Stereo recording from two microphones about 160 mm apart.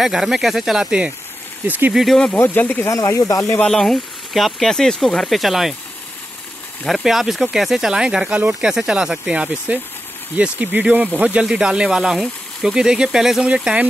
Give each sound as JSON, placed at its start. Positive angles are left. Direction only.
{"t": 0.0, "sound": "speech", "side_deg": -5}
{"t": 2.3, "sound": "speech", "side_deg": 15}
{"t": 3.5, "sound": "speech", "side_deg": 5}
{"t": 6.8, "sound": "speech", "side_deg": 0}